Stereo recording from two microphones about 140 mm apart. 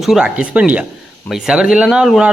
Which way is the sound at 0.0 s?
5° right (ahead or behind).